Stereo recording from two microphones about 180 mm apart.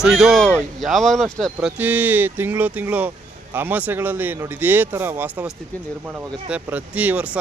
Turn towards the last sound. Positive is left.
turn(degrees=-10)  # may be behind; listen again after turning